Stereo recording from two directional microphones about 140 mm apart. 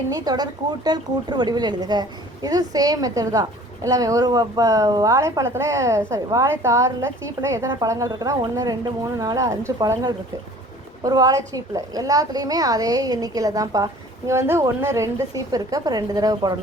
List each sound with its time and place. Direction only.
0.1 s speech: 30° right (ahead or behind)